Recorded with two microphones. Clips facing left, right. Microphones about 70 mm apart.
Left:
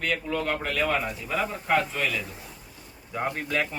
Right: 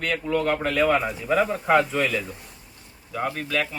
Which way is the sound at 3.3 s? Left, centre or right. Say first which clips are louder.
Right 1 dB; left.